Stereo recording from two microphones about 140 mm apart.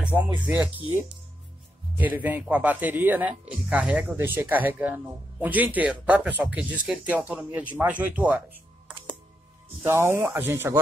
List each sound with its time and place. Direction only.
0.0 s speech: 10° right (ahead or behind)
2.0 s speech: 10° right (ahead or behind)
9.8 s speech: 20° right (ahead or behind)